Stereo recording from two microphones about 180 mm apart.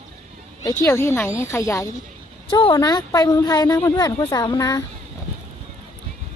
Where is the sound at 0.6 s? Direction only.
20° left (ahead or behind).